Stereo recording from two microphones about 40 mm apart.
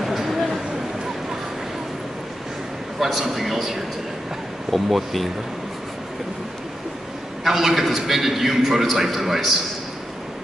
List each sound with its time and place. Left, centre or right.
0.0 s a sound: centre
3.0 s a man's voice: centre
7.4 s a man's voice: centre